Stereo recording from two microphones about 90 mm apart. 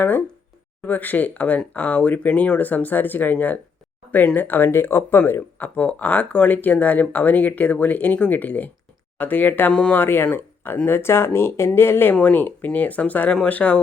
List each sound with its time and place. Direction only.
0.8 s speech: 20° left (ahead or behind)